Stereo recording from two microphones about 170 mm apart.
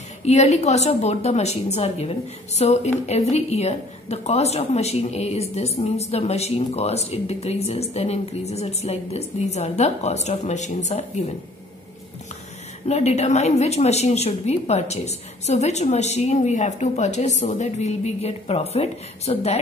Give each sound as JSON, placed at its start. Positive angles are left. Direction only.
{"t": 0.2, "sound": "a woman's voice", "side_deg": 40}
{"t": 12.8, "sound": "a woman's voice", "side_deg": 40}